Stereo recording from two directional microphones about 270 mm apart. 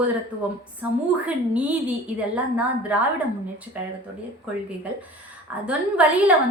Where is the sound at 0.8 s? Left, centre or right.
Centre.